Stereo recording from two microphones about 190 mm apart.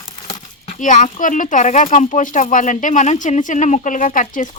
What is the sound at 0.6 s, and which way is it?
Speech, 40° left (ahead or behind).